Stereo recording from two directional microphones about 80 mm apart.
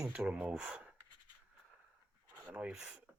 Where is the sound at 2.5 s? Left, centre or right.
Centre.